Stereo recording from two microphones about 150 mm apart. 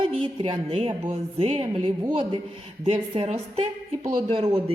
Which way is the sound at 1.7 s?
30° right (ahead or behind).